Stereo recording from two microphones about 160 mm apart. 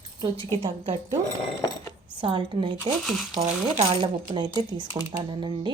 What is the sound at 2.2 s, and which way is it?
Speech, 30° right (ahead or behind).